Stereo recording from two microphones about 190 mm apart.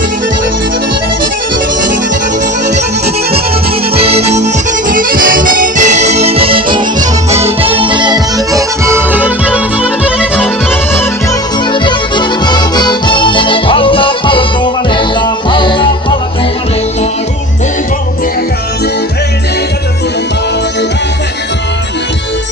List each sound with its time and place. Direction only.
3.9 s music: 30° right (ahead or behind)
4.9 s accordion: 45° right (ahead or behind); by 10.8 s centre (ahead or behind)
11.7 s music: 25° left (ahead or behind)
15.4 s music: 25° left (ahead or behind)